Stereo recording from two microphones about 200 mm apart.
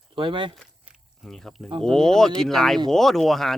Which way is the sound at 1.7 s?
25° right (ahead or behind).